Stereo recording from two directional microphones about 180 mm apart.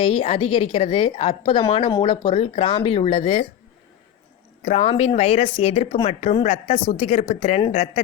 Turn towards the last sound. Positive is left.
turn(degrees=35)  # may be behind; listen again after turning